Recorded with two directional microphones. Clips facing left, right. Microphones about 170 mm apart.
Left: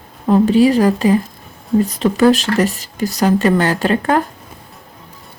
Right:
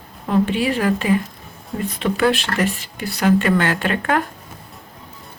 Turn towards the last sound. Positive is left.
turn(degrees=35)  # may be behind; listen again after turning